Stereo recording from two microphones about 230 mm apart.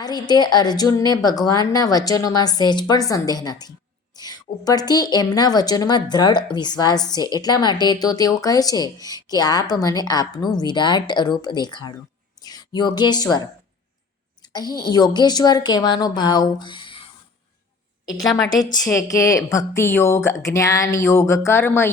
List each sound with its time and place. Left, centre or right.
0.0 s a woman's voice: centre
14.4 s a woman's voice: centre
18.6 s a woman's voice: centre